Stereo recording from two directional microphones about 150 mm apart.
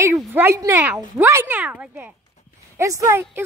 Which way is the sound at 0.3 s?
15° right (ahead or behind).